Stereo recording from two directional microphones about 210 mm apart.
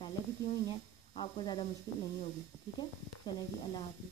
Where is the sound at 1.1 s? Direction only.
25° left (ahead or behind).